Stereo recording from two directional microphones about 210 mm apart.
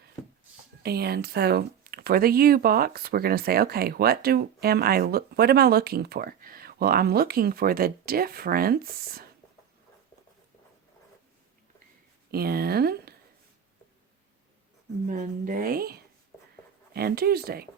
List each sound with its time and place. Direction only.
0.8 s speech: 50° right (ahead or behind)
12.3 s speech: 45° right (ahead or behind)
15.0 s speech: 40° right (ahead or behind)